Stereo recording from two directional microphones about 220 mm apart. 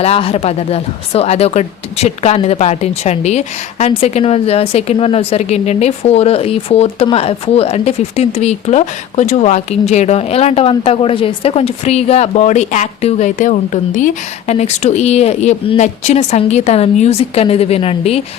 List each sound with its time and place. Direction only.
0.0 s speech: 25° left (ahead or behind)